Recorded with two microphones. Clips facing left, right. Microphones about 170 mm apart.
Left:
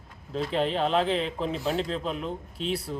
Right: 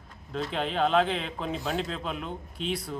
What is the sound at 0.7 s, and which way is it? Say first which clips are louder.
Speech: right 4 dB; 35° left (ahead or behind).